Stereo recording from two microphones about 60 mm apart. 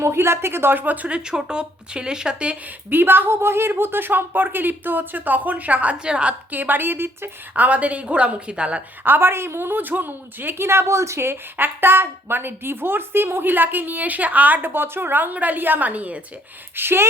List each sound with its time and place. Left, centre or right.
0.0 s a woman's voice: right; by 2.6 s centre
2.9 s a woman's voice: right; by 6.3 s centre
6.5 s a woman's voice: right
9.0 s a woman's voice: right
16.7 s a woman's voice: right